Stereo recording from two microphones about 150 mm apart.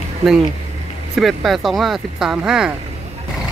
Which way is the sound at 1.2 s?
Centre (ahead or behind).